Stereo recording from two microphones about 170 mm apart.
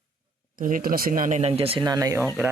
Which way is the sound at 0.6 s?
55° right (ahead or behind).